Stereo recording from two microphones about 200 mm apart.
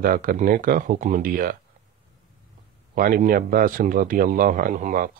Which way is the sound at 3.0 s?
45° right (ahead or behind).